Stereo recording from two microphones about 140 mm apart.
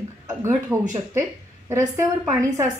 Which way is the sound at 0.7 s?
20° right (ahead or behind).